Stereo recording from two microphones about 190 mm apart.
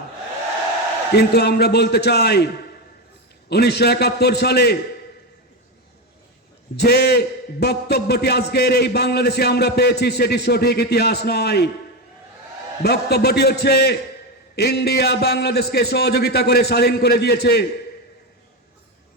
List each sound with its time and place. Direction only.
1.1 s a man's voice: 60° left (ahead or behind)
3.5 s a man's voice: 60° left (ahead or behind)
6.7 s a man's voice: 60° left (ahead or behind)
12.8 s a man's voice: 60° left (ahead or behind)